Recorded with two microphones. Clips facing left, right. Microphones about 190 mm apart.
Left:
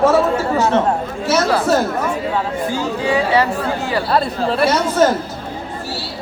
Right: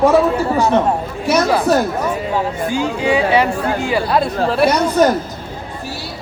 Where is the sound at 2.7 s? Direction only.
15° right (ahead or behind).